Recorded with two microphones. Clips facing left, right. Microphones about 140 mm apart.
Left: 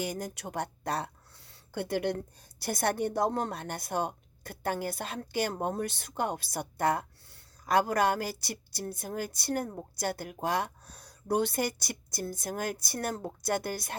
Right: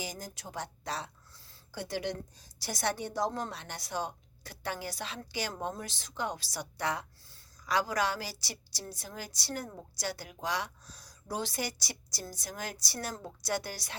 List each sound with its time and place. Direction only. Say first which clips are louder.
0.0 s speech: left 7 dB; 65° left (ahead or behind)